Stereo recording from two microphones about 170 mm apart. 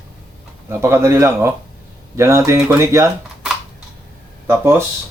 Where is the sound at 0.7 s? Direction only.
15° right (ahead or behind).